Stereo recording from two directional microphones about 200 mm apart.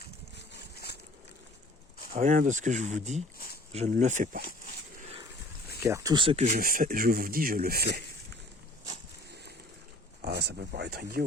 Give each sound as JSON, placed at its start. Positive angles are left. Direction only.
{"t": 0.0, "sound": "a sound", "side_deg": 55}
{"t": 2.1, "sound": "speech", "side_deg": -40}
{"t": 3.3, "sound": "a sound", "side_deg": 50}
{"t": 3.7, "sound": "speech", "side_deg": -35}
{"t": 4.9, "sound": "dog", "side_deg": -30}
{"t": 5.8, "sound": "speech", "side_deg": -15}
{"t": 10.2, "sound": "speech", "side_deg": -55}